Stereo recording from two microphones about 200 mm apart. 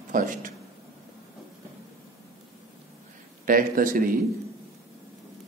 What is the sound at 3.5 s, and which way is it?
Speech, 45° right (ahead or behind).